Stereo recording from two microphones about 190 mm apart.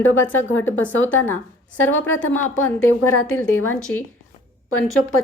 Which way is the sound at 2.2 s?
90° left.